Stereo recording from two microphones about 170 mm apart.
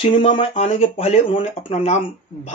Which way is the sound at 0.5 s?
40° left (ahead or behind).